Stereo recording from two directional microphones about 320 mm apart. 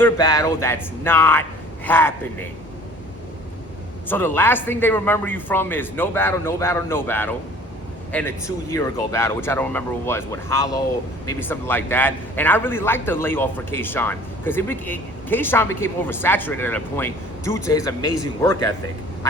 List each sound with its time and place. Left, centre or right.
0.0 s a man's voice: centre
4.1 s a man's voice: centre